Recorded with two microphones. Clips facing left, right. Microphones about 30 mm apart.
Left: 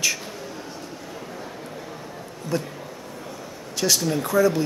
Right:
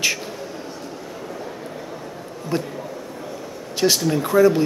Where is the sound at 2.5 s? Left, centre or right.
Right.